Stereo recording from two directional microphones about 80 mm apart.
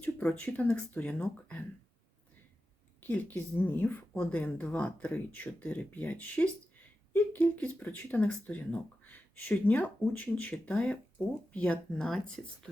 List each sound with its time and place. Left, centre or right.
0.0 s speech: left
3.0 s speech: left; by 12.7 s centre